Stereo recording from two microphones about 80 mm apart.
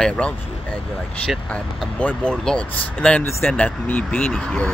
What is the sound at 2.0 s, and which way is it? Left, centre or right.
Speech, centre.